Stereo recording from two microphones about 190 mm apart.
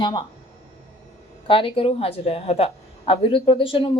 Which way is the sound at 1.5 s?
30° left (ahead or behind).